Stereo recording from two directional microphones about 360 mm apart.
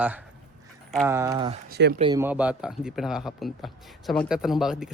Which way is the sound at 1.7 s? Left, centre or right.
Right.